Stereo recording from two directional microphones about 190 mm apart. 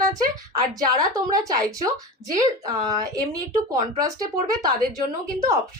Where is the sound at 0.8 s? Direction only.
20° right (ahead or behind).